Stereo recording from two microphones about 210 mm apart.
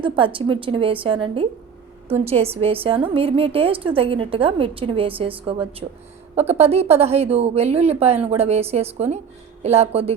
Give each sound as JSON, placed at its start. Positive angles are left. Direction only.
{"t": 0.3, "sound": "a woman's voice", "side_deg": -25}